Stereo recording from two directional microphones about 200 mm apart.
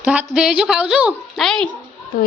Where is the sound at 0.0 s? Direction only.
5° right (ahead or behind).